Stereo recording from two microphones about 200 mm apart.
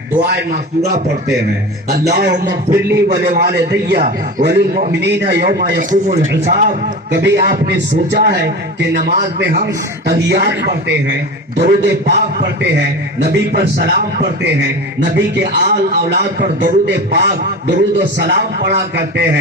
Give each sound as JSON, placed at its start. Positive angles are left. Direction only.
{"t": 1.9, "sound": "a man's voice", "side_deg": -55}
{"t": 15.0, "sound": "a man's voice", "side_deg": -60}